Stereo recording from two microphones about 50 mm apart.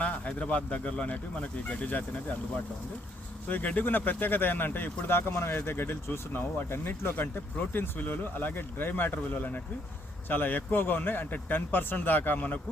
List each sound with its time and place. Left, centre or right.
0.0 s speech: left
3.5 s a man's voice: left